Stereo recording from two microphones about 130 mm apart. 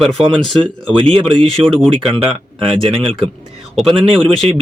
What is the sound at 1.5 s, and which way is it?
Speech, 5° left (ahead or behind).